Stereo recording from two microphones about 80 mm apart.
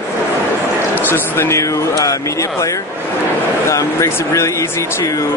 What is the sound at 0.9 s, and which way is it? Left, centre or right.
Speech, left.